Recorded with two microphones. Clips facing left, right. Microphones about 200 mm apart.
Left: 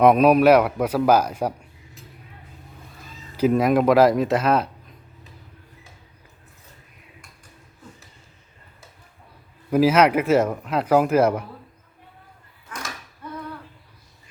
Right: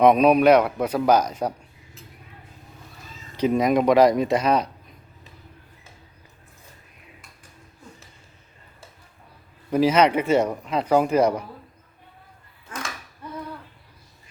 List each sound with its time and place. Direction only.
0.0 s a man's voice: 5° left (ahead or behind)
3.3 s speech: 5° left (ahead or behind)
9.6 s speech: 5° left (ahead or behind)